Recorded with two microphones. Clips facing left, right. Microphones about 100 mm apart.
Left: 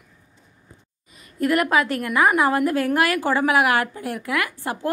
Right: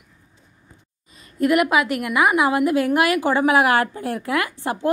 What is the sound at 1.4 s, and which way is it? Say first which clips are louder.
A woman's voice: right 2 dB; 15° right (ahead or behind).